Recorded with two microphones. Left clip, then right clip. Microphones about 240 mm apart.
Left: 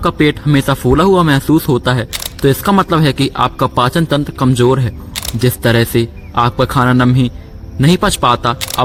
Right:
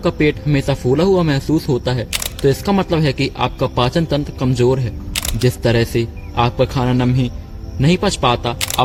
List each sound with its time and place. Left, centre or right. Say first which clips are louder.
0.0 s a man's voice: left 3 dB; left